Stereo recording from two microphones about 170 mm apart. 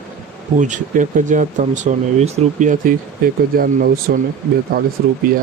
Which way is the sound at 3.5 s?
60° right (ahead or behind).